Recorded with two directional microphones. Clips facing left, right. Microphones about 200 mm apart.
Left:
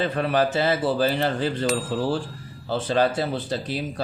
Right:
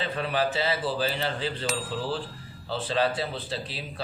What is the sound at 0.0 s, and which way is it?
Speech, 45° left (ahead or behind).